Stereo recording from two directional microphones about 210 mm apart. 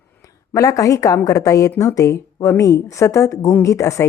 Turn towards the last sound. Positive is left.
turn(degrees=15)  # may be behind; listen again after turning